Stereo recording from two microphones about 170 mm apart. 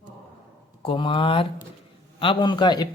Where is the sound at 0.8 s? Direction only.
30° left (ahead or behind).